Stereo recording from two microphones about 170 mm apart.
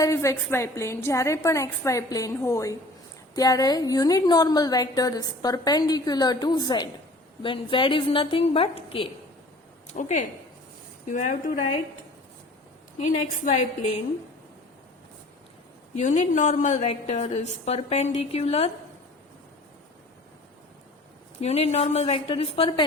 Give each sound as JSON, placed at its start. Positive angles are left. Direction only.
{"t": 0.0, "sound": "a woman's voice", "side_deg": 15}
{"t": 9.8, "sound": "a woman's voice", "side_deg": 45}
{"t": 13.0, "sound": "a woman's voice", "side_deg": 45}
{"t": 16.0, "sound": "a woman's voice", "side_deg": 45}
{"t": 21.4, "sound": "a woman's voice", "side_deg": 40}